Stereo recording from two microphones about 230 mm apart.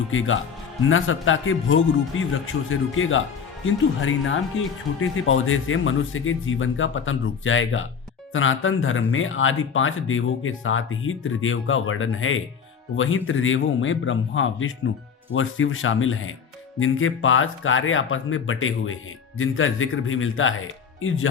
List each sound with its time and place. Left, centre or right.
0.1 s speech: left